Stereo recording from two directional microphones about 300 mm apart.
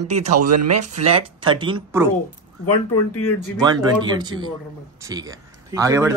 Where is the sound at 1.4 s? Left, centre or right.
Centre.